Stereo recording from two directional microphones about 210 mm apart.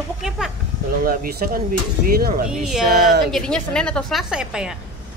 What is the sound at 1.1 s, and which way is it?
Speech, 45° right (ahead or behind).